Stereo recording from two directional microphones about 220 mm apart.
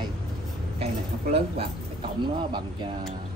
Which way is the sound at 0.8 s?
25° right (ahead or behind).